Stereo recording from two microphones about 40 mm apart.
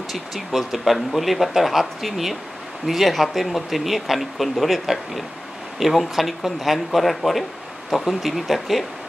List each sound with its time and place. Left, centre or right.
0.1 s speech: centre